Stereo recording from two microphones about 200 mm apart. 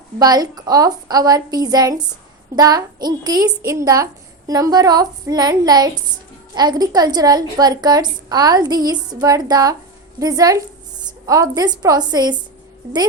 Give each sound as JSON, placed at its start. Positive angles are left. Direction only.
{"t": 0.2, "sound": "a woman's voice", "side_deg": -20}